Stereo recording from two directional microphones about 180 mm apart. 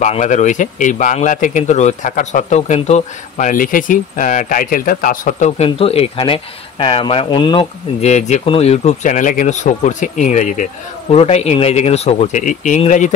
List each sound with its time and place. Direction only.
0.0 s speech: 40° left (ahead or behind)
5.6 s speech: 35° left (ahead or behind)